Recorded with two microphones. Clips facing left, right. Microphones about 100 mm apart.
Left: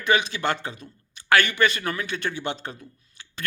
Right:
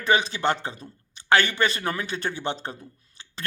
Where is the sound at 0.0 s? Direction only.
35° right (ahead or behind).